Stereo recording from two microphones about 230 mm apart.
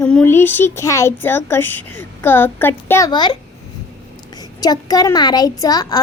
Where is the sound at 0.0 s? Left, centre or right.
Centre.